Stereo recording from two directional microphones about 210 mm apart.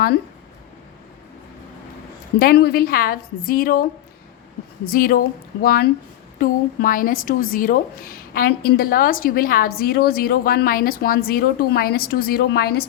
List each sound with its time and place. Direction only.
2.4 s a woman's voice: 45° left (ahead or behind)
4.9 s a woman's voice: 45° left (ahead or behind)